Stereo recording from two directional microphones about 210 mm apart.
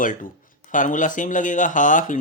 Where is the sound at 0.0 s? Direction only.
40° left (ahead or behind).